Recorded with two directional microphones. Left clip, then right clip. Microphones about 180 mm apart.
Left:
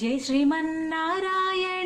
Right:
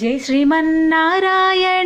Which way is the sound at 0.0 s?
25° right (ahead or behind).